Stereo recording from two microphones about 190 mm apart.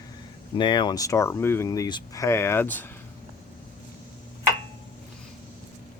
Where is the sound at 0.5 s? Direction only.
25° left (ahead or behind).